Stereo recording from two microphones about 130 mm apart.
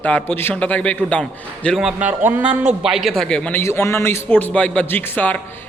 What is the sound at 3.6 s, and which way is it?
A man's voice, 20° left (ahead or behind).